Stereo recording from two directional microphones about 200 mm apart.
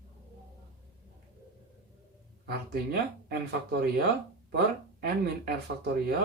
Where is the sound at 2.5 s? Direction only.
55° right (ahead or behind).